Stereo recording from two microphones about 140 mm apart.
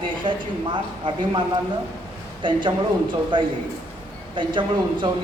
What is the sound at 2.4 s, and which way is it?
A man's voice, 35° right (ahead or behind).